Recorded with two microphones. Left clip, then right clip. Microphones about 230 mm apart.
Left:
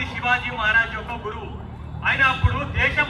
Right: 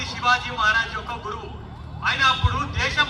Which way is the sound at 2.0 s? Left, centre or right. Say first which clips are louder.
Even; centre.